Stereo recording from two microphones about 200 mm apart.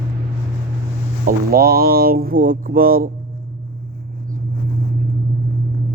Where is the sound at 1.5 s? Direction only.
50° right (ahead or behind).